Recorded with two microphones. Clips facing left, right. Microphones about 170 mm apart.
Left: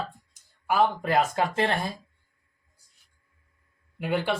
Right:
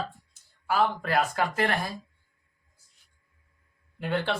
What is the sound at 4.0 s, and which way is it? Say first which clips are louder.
Speech: left 2 dB; 10° left (ahead or behind).